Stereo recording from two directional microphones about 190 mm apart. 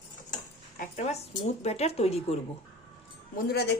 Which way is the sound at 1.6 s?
35° left (ahead or behind).